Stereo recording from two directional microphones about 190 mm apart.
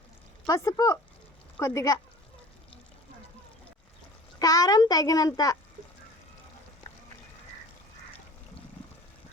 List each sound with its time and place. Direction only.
0.4 s speech: 15° left (ahead or behind)
4.4 s a child's voice: 20° left (ahead or behind)